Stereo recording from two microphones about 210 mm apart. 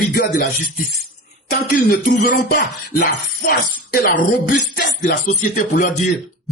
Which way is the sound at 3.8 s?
40° left (ahead or behind).